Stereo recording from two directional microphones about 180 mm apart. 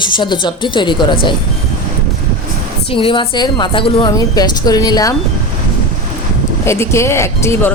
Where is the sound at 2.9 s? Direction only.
30° left (ahead or behind).